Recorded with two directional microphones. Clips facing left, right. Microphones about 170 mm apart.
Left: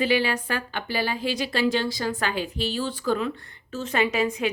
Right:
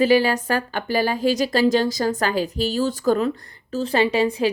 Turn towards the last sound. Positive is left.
turn(degrees=-30)  # may be behind; listen again after turning